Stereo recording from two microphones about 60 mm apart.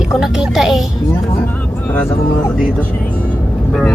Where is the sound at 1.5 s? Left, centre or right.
Left.